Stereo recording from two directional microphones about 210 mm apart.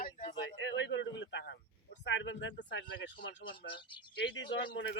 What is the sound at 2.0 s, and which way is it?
Speech, 60° left (ahead or behind).